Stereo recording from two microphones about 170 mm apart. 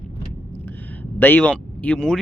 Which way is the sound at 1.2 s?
10° left (ahead or behind).